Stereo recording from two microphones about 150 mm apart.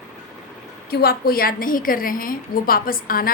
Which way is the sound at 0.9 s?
90° left.